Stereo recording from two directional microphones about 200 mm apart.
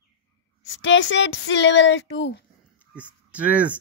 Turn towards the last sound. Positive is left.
turn(degrees=-5)  # may be behind; listen again after turning